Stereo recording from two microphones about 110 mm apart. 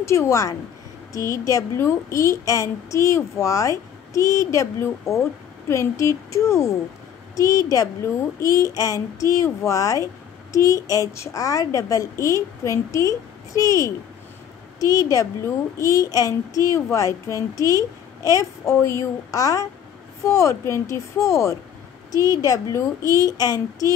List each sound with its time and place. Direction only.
0.0 s a woman's voice: 25° left (ahead or behind)